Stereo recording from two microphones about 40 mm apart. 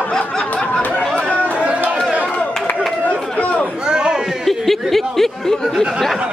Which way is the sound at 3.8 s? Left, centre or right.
Centre.